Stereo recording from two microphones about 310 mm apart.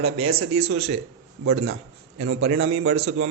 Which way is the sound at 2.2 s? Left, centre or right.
Right.